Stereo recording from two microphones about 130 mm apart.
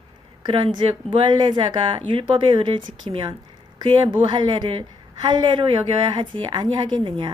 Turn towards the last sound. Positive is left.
turn(degrees=-40)  # may be behind; listen again after turning